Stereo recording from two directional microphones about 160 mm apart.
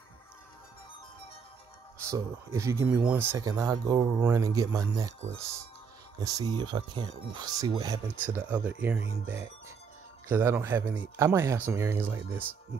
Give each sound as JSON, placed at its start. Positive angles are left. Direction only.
{"t": 2.0, "sound": "speech", "side_deg": -20}
{"t": 8.2, "sound": "speech", "side_deg": -10}